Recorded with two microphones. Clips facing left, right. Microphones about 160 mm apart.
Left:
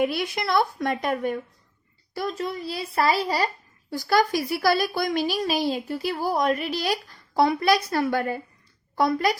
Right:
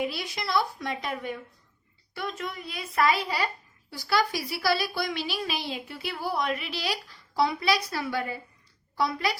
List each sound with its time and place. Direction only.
0.0 s a woman's voice: 55° left (ahead or behind)
2.1 s a child's voice: 35° left (ahead or behind)